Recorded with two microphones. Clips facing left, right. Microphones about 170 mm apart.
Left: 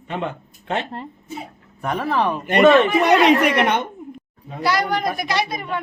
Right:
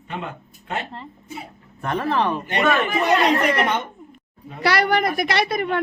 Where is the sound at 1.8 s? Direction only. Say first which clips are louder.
Left 1 dB; 10° left (ahead or behind).